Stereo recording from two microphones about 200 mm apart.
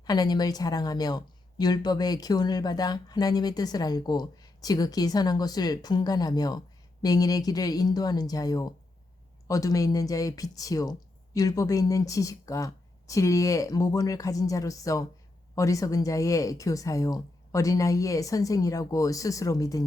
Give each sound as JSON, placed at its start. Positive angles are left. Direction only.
{"t": 0.0, "sound": "a woman's voice", "side_deg": 20}